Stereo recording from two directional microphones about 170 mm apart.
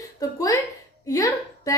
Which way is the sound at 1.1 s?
20° left (ahead or behind).